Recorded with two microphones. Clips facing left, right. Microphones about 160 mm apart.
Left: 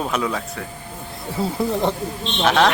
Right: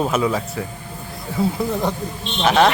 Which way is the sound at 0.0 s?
Centre (ahead or behind).